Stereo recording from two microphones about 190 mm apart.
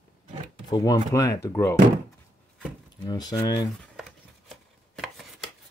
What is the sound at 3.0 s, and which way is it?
Speech, 20° left (ahead or behind).